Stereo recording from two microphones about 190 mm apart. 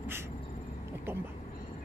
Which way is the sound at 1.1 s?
10° right (ahead or behind).